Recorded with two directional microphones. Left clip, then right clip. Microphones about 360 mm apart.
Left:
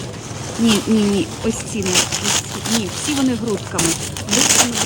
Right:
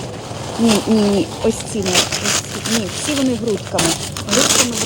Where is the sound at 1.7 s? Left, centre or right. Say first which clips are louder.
Right 2 dB; centre.